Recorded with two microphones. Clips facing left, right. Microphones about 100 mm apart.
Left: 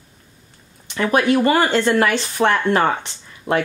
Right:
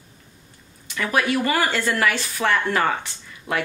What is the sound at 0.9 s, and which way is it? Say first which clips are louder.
Speech: left 5 dB; 30° left (ahead or behind).